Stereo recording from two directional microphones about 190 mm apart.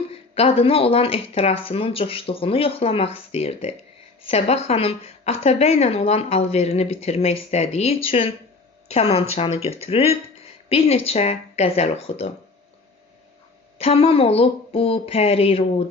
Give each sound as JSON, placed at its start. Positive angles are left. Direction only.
{"t": 0.1, "sound": "speech", "side_deg": 30}
{"t": 13.7, "sound": "speech", "side_deg": 30}